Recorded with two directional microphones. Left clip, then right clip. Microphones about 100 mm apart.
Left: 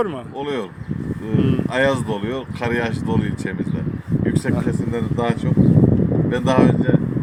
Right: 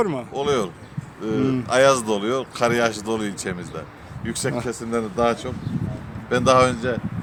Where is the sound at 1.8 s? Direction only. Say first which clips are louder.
Right 3 dB; 20° right (ahead or behind).